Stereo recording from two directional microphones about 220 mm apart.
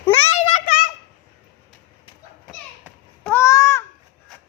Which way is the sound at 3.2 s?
10° left (ahead or behind).